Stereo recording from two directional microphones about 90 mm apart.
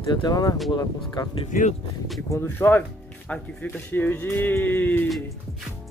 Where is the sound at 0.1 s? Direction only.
50° left (ahead or behind).